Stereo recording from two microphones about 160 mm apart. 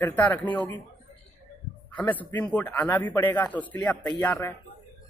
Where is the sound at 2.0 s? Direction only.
10° left (ahead or behind).